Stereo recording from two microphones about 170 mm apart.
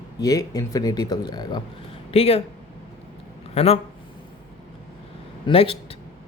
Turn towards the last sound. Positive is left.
turn(degrees=30)  # may be behind; listen again after turning